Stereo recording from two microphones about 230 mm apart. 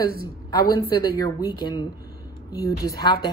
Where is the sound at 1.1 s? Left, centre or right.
Centre.